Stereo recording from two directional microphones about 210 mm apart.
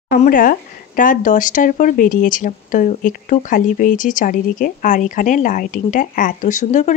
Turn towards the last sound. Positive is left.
turn(degrees=35)  # may be behind; listen again after turning